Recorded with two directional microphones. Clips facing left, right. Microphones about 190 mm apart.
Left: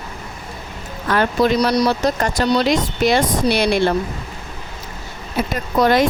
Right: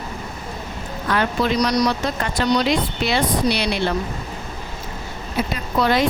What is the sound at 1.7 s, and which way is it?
Speech, 40° left (ahead or behind).